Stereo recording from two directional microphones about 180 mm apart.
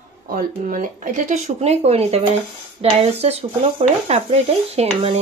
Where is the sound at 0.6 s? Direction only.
45° right (ahead or behind).